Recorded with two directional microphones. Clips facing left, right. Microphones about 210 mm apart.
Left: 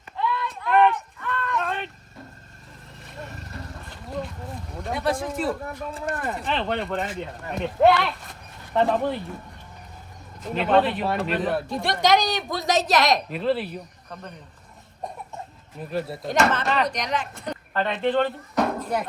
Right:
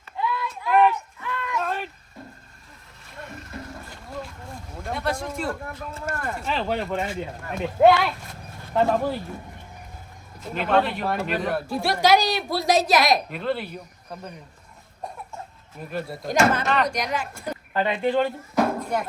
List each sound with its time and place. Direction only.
0.2 s a sound: 5° right (ahead or behind)
3.1 s music: centre (ahead or behind)
3.3 s music: 35° left (ahead or behind)
4.8 s a sound: centre (ahead or behind)
6.2 s speech: centre (ahead or behind)
10.4 s speech: centre (ahead or behind)
15.9 s speech: centre (ahead or behind)